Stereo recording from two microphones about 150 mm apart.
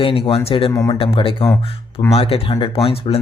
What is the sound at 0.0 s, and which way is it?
Speech, 40° left (ahead or behind).